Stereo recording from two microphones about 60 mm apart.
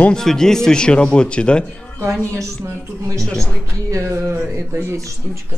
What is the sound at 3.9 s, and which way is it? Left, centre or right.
Speech, right.